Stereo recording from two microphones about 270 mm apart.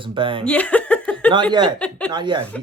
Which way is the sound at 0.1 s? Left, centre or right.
Centre.